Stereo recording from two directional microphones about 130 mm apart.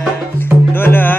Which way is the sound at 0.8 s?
15° left (ahead or behind).